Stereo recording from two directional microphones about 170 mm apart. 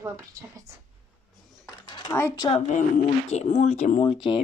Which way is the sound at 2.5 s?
45° left (ahead or behind).